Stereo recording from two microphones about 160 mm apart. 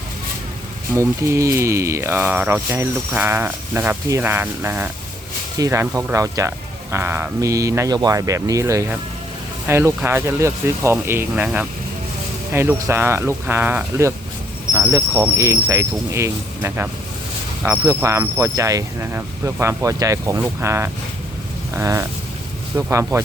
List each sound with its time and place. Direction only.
0.9 s speech: 20° right (ahead or behind)